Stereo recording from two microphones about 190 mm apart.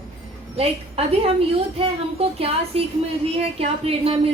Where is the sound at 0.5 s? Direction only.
30° right (ahead or behind).